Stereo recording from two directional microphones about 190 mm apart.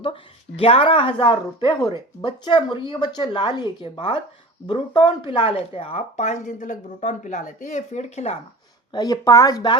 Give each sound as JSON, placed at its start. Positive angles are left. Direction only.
{"t": 0.0, "sound": "speech", "side_deg": 30}
{"t": 8.9, "sound": "speech", "side_deg": 20}